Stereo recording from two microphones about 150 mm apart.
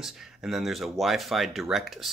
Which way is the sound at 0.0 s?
5° right (ahead or behind).